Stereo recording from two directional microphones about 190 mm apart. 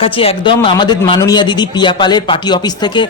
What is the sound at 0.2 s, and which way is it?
A man's voice, 30° left (ahead or behind).